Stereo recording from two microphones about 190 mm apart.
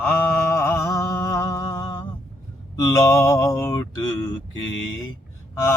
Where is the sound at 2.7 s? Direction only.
15° left (ahead or behind).